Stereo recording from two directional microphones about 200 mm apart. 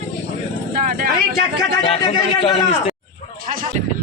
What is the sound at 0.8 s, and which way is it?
Speech, 45° right (ahead or behind).